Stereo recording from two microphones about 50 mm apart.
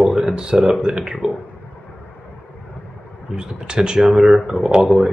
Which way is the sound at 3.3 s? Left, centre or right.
Centre.